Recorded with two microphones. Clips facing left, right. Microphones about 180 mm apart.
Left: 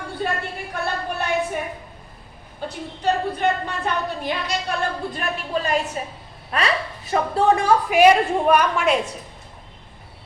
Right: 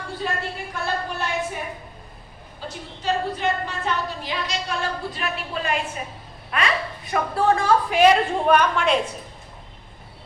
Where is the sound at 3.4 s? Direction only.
55° left (ahead or behind).